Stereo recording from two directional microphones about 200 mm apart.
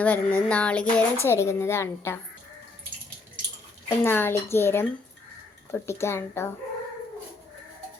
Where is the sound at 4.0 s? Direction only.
10° left (ahead or behind).